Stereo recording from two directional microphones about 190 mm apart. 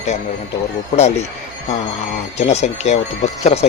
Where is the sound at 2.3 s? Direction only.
35° left (ahead or behind).